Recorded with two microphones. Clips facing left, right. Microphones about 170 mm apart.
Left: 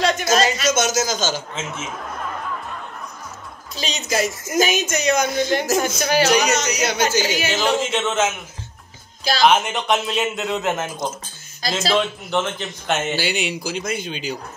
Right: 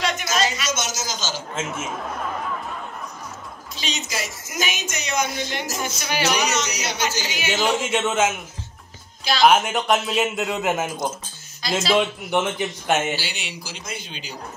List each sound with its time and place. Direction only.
0.0 s speech: 40° left (ahead or behind)
1.5 s speech: 10° right (ahead or behind)
3.8 s speech: 50° left (ahead or behind)
7.6 s speech: 10° right (ahead or behind)
9.4 s speech: 5° right (ahead or behind)
13.1 s speech: 55° left (ahead or behind)